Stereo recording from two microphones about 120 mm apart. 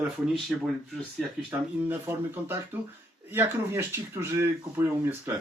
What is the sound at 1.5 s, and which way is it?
Speech, 15° right (ahead or behind).